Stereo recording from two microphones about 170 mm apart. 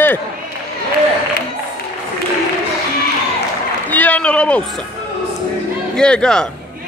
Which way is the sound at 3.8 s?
10° left (ahead or behind).